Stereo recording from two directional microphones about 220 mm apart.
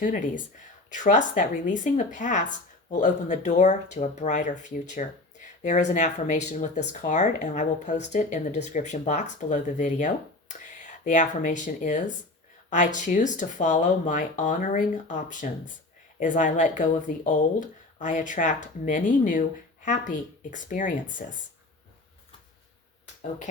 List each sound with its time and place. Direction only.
0.0 s speech: 35° left (ahead or behind)